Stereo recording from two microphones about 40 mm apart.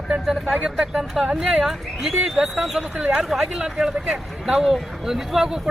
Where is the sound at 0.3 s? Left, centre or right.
Centre.